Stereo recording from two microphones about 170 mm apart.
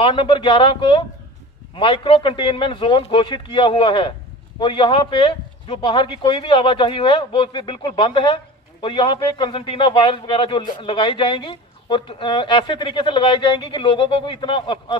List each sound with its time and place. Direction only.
0.0 s a woman's voice: 30° left (ahead or behind)